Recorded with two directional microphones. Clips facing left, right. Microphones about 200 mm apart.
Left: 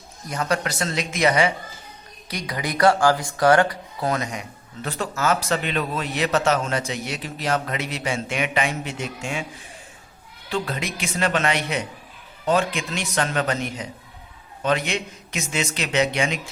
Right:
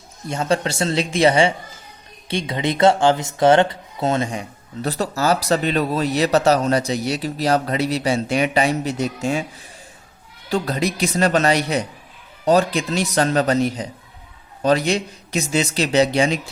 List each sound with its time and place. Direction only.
0.3 s speech: 25° right (ahead or behind)
10.5 s speech: 40° right (ahead or behind)